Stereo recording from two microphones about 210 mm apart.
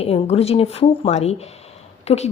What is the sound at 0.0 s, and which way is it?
A woman's voice, 30° left (ahead or behind).